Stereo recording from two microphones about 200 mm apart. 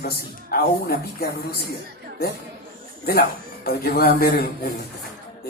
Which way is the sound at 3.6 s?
50° left (ahead or behind).